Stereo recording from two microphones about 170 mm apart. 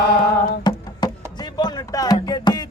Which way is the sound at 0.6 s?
25° left (ahead or behind).